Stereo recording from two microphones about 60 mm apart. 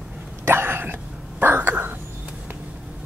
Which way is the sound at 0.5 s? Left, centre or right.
Right.